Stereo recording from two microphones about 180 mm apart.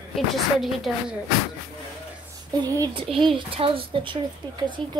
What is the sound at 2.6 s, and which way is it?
Speech, 20° right (ahead or behind).